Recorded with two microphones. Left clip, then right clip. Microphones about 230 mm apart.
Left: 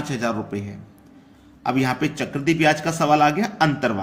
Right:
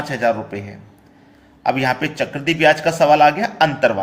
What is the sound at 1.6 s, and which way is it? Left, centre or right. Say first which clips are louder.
A man's voice: right 4 dB; left.